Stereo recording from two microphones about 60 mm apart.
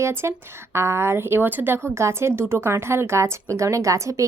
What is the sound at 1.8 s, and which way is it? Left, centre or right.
A woman's voice, right.